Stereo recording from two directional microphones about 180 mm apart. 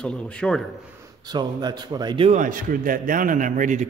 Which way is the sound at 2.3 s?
50° right (ahead or behind).